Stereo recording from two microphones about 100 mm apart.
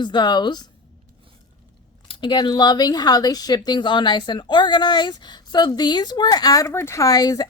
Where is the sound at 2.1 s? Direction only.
55° left (ahead or behind); by 6.7 s 40° left (ahead or behind).